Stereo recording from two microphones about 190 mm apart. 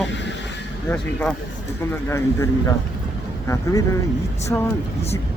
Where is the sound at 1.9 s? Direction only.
15° left (ahead or behind).